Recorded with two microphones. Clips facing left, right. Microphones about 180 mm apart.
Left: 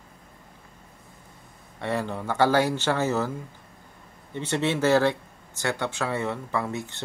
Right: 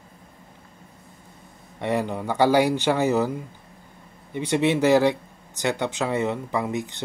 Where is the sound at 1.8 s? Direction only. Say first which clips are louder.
Right 4 dB; 15° right (ahead or behind).